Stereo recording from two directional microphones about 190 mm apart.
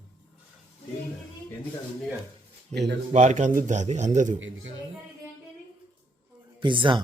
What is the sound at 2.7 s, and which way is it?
Speech, 65° right (ahead or behind).